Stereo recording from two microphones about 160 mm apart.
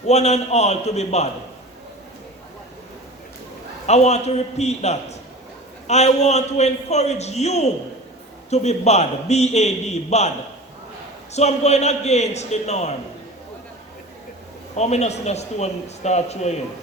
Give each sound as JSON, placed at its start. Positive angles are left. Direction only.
{"t": 0.0, "sound": "a man's voice", "side_deg": 45}
{"t": 3.8, "sound": "a man's voice", "side_deg": 45}
{"t": 11.3, "sound": "a man's voice", "side_deg": 45}
{"t": 14.8, "sound": "a man's voice", "side_deg": 45}